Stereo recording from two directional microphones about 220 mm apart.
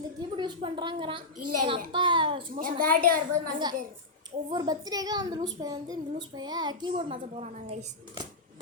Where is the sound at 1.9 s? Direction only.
20° right (ahead or behind).